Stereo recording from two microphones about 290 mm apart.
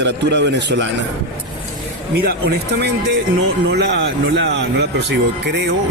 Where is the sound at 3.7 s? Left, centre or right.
Right.